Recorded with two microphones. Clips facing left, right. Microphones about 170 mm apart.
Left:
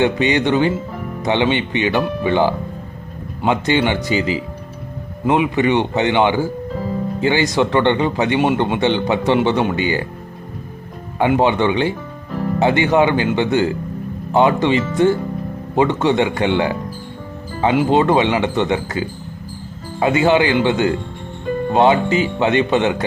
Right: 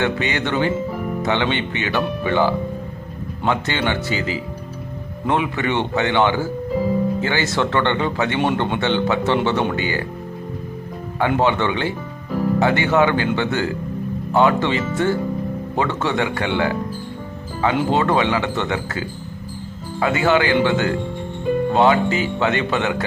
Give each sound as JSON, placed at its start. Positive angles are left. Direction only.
{"t": 0.0, "sound": "speech", "side_deg": 20}
{"t": 11.2, "sound": "speech", "side_deg": 15}